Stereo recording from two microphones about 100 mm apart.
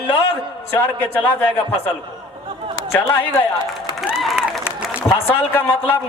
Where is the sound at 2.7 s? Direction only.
30° left (ahead or behind).